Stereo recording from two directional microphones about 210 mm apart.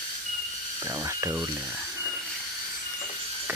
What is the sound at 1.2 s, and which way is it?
Speech, 15° right (ahead or behind).